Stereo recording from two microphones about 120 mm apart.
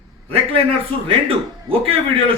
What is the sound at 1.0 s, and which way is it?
Speech, 50° right (ahead or behind).